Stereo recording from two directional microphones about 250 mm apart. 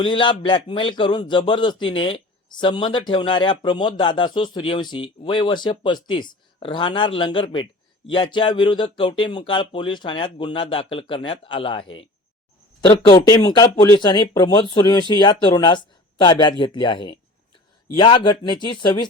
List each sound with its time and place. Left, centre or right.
0.0 s a man's voice: centre